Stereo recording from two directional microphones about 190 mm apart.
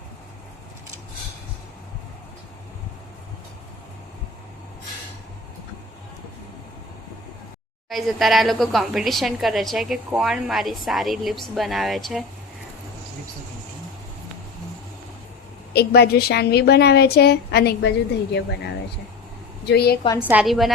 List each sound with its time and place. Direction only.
7.9 s a woman's voice: centre (ahead or behind)
15.7 s a woman's voice: 55° left (ahead or behind)
19.6 s a woman's voice: 55° left (ahead or behind)
20.2 s a woman's voice: 5° right (ahead or behind)